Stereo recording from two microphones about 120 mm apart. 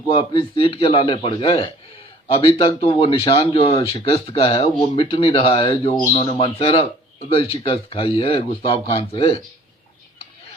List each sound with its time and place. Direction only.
0.1 s speech: 50° left (ahead or behind)